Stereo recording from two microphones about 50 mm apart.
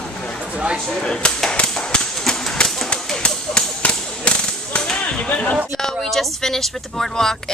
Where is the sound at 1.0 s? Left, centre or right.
Centre.